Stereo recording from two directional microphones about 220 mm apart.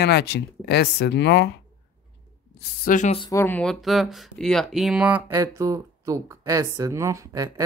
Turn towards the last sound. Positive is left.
turn(degrees=-15)  # may be behind; listen again after turning